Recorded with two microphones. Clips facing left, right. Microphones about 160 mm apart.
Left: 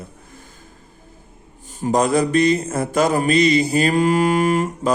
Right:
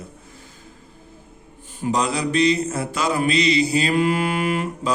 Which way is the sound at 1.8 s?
50° left (ahead or behind).